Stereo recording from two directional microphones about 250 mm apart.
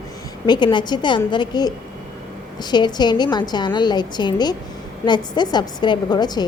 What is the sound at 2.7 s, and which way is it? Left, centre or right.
A woman's voice, centre.